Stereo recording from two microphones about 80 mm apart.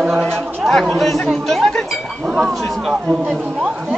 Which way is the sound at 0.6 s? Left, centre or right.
Centre.